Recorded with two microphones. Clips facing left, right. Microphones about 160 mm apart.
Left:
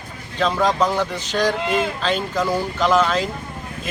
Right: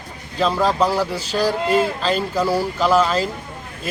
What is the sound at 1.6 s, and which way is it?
Speech, 35° right (ahead or behind).